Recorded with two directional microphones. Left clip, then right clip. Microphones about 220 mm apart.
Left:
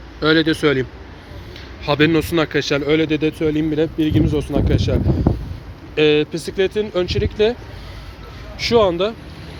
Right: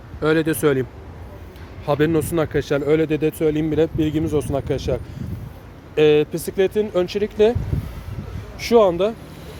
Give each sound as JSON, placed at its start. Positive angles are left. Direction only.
{"t": 0.2, "sound": "speech", "side_deg": -15}
{"t": 8.5, "sound": "speech", "side_deg": -15}